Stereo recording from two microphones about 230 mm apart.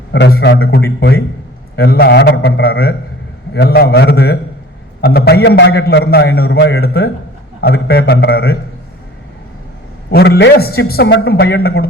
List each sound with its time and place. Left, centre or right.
0.1 s a man's voice: left
10.1 s a man's voice: left